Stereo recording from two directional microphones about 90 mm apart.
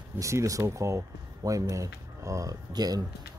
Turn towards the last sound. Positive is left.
turn(degrees=-45)  # may be behind; listen again after turning